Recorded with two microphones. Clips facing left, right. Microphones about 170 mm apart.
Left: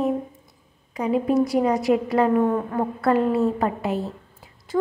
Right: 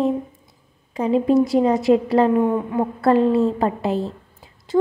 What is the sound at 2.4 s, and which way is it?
Speech, 15° right (ahead or behind).